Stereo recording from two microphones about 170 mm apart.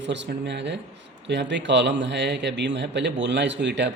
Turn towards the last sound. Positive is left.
turn(degrees=-90)